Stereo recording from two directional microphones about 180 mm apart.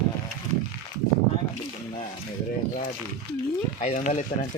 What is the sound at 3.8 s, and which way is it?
Speech, 40° left (ahead or behind).